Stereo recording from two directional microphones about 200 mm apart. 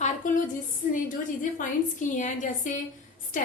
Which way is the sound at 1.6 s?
40° left (ahead or behind).